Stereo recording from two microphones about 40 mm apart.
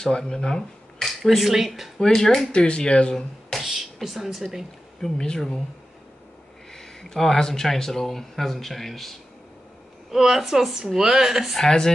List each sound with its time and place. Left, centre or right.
0.0 s speech: centre
1.0 s speech: centre
2.0 s speech: centre
2.5 s speech: left
3.5 s speech: centre
5.0 s speech: centre
6.7 s speech: centre
10.1 s a woman's voice: centre
11.5 s speech: centre